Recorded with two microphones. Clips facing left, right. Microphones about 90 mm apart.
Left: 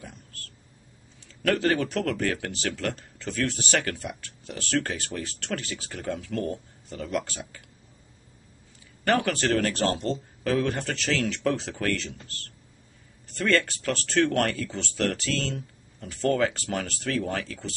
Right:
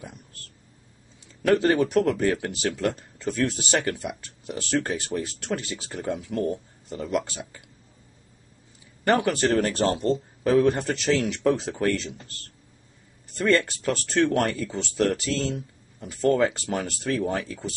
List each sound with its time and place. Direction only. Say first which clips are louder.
1.4 s speech: right 4 dB; 20° right (ahead or behind)
9.2 s speech: right 3 dB; 10° right (ahead or behind)
13.4 s speech: right 2 dB; 20° right (ahead or behind)